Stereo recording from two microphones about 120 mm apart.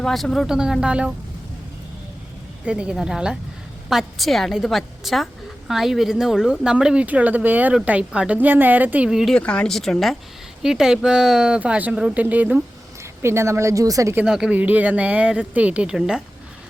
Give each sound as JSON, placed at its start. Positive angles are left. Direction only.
{"t": 0.0, "sound": "a woman's voice", "side_deg": 5}
{"t": 2.6, "sound": "a woman's voice", "side_deg": -10}
{"t": 9.3, "sound": "a woman's voice", "side_deg": 10}
{"t": 14.2, "sound": "speech", "side_deg": -5}